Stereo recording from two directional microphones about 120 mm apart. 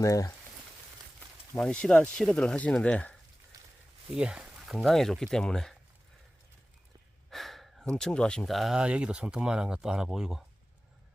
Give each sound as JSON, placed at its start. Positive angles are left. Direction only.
{"t": 0.0, "sound": "speech", "side_deg": 25}
{"t": 1.5, "sound": "speech", "side_deg": 10}
{"t": 3.5, "sound": "a sound", "side_deg": -30}
{"t": 4.1, "sound": "speech", "side_deg": -5}
{"t": 7.3, "sound": "speech", "side_deg": 0}